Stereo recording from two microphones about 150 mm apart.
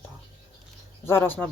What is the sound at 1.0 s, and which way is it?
Speech, 15° left (ahead or behind).